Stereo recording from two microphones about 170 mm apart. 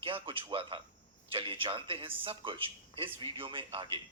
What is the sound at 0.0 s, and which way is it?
A man's voice, 30° right (ahead or behind).